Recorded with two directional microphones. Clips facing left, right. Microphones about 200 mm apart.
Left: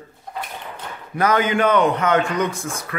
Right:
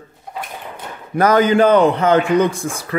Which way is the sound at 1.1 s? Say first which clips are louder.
Right 6 dB; 40° right (ahead or behind).